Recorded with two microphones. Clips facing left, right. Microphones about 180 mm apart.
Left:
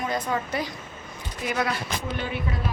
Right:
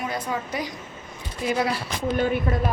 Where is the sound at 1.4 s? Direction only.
30° right (ahead or behind).